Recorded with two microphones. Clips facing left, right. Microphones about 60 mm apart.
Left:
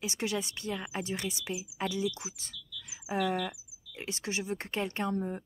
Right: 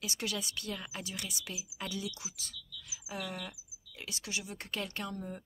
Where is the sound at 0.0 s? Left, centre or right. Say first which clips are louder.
Left 5 dB; left.